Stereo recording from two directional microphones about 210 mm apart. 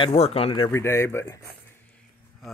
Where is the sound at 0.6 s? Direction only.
15° left (ahead or behind).